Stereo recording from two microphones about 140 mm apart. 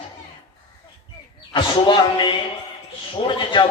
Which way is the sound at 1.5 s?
35° left (ahead or behind).